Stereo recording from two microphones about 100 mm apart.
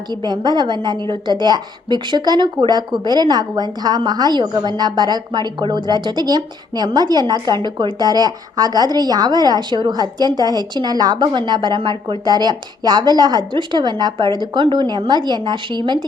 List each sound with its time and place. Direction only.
0.1 s a woman's voice: 45° right (ahead or behind)